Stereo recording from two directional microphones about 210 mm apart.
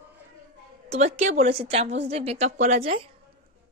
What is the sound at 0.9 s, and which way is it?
A woman's voice, 35° right (ahead or behind).